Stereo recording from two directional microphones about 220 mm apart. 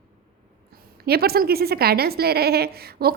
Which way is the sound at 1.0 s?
45° right (ahead or behind).